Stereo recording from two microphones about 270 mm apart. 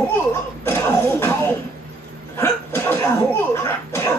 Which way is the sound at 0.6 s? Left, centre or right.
Centre.